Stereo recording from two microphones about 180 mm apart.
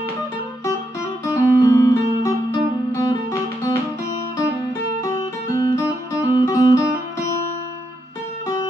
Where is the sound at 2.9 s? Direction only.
15° left (ahead or behind).